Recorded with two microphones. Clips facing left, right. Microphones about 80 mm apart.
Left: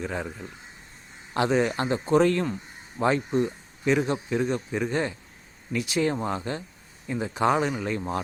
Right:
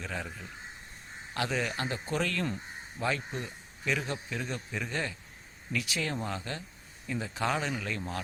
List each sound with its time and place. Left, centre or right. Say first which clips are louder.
0.0 s speech: left 7 dB; left